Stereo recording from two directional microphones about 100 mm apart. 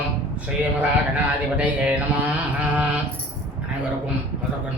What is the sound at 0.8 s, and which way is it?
Mantra, 15° right (ahead or behind).